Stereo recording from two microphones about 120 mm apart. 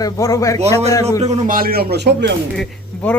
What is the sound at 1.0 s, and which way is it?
Speech, 65° right (ahead or behind).